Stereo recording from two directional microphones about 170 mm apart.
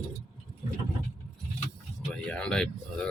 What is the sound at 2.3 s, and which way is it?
Speech, 5° left (ahead or behind).